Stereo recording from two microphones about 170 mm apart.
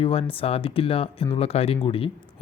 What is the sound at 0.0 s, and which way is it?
Speech, 35° left (ahead or behind).